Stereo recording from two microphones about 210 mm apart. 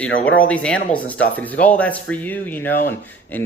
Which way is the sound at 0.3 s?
5° left (ahead or behind).